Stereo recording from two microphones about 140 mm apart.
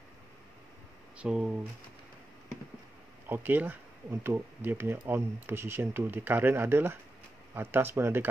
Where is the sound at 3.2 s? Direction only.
15° right (ahead or behind).